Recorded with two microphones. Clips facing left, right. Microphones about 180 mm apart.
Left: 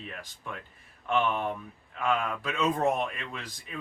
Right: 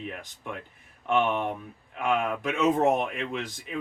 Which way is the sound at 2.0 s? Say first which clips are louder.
Right 3 dB; 20° right (ahead or behind).